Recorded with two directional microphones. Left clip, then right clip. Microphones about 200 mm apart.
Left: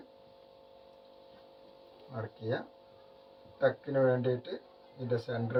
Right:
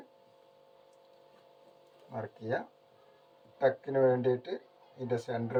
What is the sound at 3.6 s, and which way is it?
Speech, 40° right (ahead or behind).